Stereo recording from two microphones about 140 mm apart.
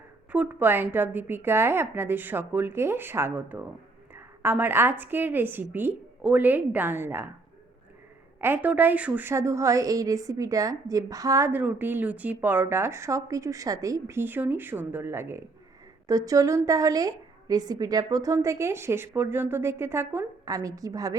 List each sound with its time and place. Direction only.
0.3 s a woman's voice: 10° right (ahead or behind)
8.4 s a woman's voice: 15° right (ahead or behind)